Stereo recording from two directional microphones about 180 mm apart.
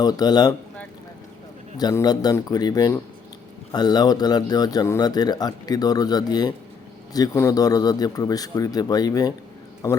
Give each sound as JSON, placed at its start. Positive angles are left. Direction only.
{"t": 0.0, "sound": "speech", "side_deg": 20}
{"t": 1.8, "sound": "speech", "side_deg": 20}